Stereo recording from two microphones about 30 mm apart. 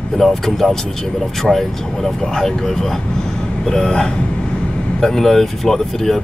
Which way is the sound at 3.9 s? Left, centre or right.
Left.